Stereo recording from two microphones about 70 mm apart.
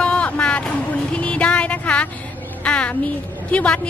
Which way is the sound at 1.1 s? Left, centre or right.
Centre.